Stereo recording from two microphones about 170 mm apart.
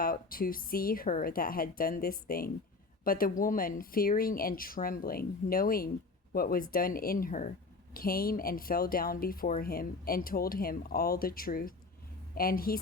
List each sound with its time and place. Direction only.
0.0 s speech: 60° left (ahead or behind)